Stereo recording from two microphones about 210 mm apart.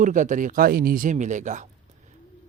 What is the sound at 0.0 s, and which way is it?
Speech, 35° right (ahead or behind).